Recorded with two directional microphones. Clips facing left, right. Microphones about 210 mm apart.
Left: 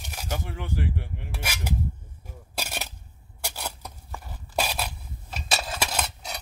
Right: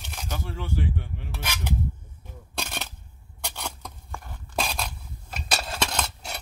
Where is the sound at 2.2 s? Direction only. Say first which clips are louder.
Even; 10° left (ahead or behind).